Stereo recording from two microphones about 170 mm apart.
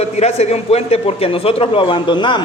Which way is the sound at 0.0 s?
40° left (ahead or behind).